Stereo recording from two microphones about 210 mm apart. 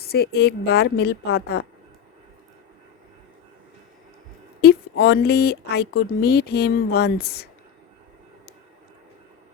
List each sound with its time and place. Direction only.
0.0 s speech: 50° left (ahead or behind)
4.6 s speech: 50° left (ahead or behind)